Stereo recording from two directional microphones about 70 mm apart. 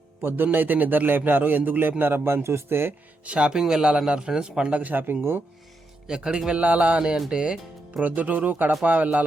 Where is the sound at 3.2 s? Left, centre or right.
Centre.